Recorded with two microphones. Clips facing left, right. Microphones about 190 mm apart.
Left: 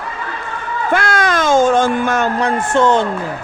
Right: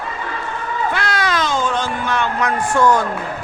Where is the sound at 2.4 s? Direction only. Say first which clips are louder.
Even; 25° left (ahead or behind).